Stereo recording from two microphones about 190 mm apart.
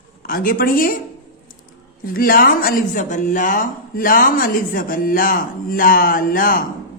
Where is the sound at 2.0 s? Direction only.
50° left (ahead or behind).